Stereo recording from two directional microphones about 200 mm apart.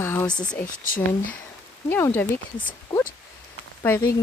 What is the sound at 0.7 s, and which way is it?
Speech, 45° left (ahead or behind).